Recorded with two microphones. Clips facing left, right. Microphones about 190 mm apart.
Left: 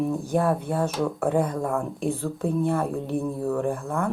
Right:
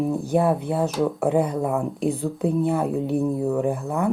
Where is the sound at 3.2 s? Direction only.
15° right (ahead or behind).